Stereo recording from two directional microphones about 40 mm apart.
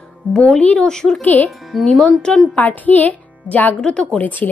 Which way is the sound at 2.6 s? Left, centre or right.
Left.